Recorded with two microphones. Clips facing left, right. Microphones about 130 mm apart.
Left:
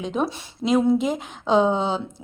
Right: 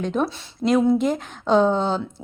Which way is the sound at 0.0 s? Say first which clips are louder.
Right 2 dB; 5° left (ahead or behind).